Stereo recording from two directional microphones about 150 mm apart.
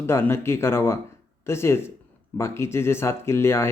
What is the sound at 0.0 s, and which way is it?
A man's voice, 15° left (ahead or behind).